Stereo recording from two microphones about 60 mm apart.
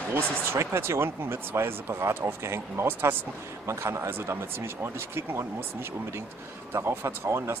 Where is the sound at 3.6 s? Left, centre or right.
Right.